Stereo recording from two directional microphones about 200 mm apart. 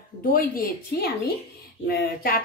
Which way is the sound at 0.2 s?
45° left (ahead or behind).